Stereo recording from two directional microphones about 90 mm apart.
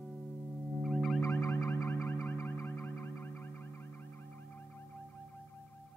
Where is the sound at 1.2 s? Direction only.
30° left (ahead or behind).